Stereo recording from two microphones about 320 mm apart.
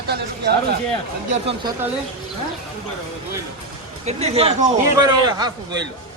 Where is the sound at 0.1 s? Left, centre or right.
Right.